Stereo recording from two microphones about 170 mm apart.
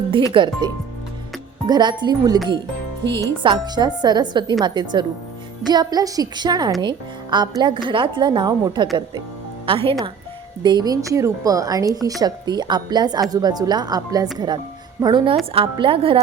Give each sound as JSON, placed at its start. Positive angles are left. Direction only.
{"t": 0.3, "sound": "a woman's voice", "side_deg": -25}